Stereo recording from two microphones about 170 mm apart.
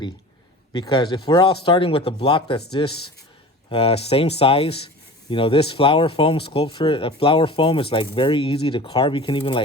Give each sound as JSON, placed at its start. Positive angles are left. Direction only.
{"t": 0.7, "sound": "speech", "side_deg": 30}